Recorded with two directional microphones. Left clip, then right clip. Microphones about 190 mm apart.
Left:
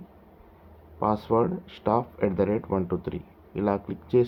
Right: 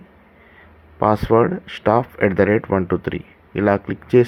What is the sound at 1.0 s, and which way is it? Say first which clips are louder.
Speech: right 9 dB; 30° right (ahead or behind).